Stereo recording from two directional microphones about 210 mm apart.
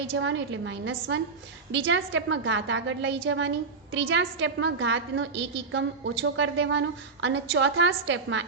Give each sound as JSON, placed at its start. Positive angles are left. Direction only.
{"t": 0.1, "sound": "a woman's voice", "side_deg": -65}